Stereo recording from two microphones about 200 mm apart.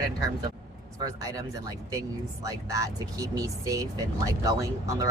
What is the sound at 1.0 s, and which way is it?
Speech, 15° right (ahead or behind).